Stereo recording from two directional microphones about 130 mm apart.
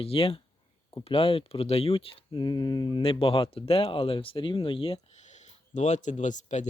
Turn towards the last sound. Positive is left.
turn(degrees=70)  # may be behind; listen again after turning